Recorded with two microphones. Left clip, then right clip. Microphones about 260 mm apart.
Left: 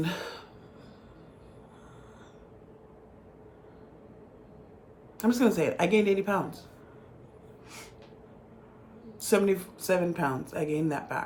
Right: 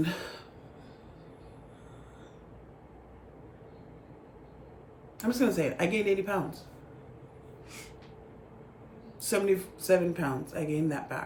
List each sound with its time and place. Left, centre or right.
0.0 s a sound: centre
5.2 s speech: centre
9.2 s speech: centre